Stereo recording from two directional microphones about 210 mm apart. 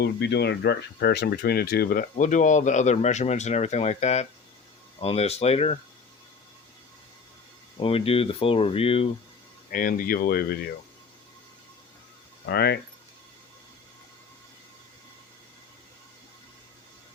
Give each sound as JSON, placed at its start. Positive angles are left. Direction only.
{"t": 0.0, "sound": "speech", "side_deg": 50}
{"t": 7.8, "sound": "speech", "side_deg": 25}
{"t": 9.7, "sound": "speech", "side_deg": 45}
{"t": 12.5, "sound": "speech", "side_deg": 50}